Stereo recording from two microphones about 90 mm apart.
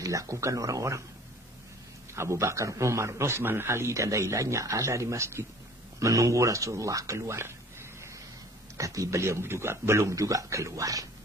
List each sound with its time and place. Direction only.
0.0 s a man's voice: 35° right (ahead or behind)
2.1 s a man's voice: 30° right (ahead or behind)
8.7 s a man's voice: 40° right (ahead or behind)